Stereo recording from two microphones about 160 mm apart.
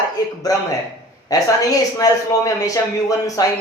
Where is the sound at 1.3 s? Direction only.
20° left (ahead or behind).